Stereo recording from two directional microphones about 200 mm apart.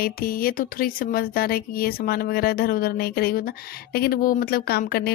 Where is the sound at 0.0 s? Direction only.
45° left (ahead or behind).